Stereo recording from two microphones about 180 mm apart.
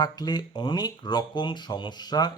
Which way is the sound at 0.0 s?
20° left (ahead or behind).